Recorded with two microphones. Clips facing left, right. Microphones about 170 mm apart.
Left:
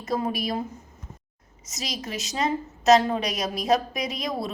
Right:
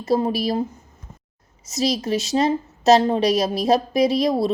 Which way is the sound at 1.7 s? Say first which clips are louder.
Right 12 dB; 30° right (ahead or behind).